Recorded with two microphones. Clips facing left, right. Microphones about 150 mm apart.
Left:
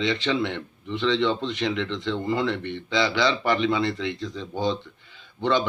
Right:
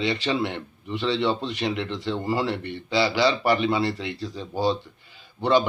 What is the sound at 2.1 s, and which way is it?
Speech, 35° right (ahead or behind).